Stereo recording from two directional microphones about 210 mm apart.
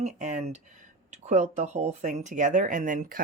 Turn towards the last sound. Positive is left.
turn(degrees=-40)  # may be behind; listen again after turning